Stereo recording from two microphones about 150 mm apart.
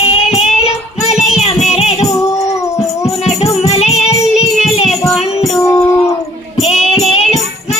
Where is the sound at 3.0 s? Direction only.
45° left (ahead or behind).